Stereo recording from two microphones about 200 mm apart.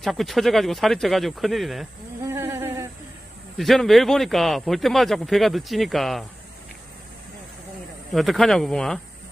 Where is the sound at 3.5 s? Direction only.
Centre (ahead or behind).